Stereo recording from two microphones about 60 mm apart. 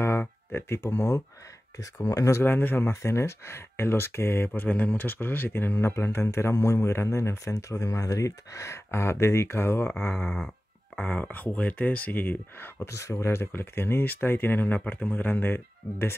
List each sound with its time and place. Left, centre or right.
0.5 s speech: left
0.9 s speech: left
2.0 s speech: left
2.4 s speech: left
2.9 s speech: left
4.6 s speech: left
11.0 s speech: left
12.8 s speech: left